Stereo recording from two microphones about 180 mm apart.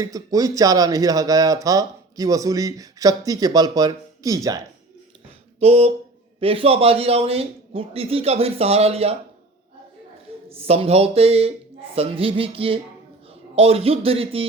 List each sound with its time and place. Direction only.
0.0 s speech: 20° right (ahead or behind)
5.5 s speech: 35° right (ahead or behind)
10.6 s speech: 35° right (ahead or behind)